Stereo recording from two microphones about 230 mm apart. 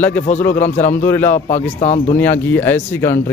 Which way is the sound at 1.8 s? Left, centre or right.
Left.